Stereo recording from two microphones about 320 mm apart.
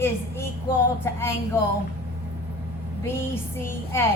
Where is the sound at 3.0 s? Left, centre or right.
Centre.